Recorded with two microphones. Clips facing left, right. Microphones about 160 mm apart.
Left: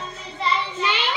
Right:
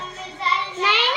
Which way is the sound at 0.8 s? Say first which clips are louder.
Right 3 dB; 85° right.